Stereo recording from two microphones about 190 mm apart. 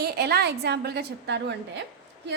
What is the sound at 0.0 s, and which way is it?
A woman's voice, 55° right (ahead or behind).